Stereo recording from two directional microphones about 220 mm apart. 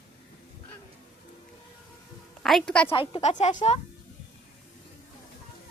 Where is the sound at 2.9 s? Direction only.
25° left (ahead or behind).